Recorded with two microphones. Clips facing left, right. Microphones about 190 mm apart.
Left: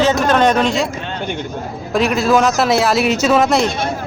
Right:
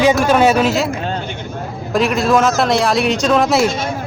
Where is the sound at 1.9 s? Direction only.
Centre (ahead or behind).